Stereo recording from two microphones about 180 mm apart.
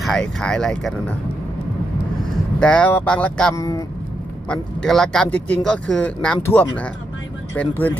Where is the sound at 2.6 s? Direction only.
5° left (ahead or behind).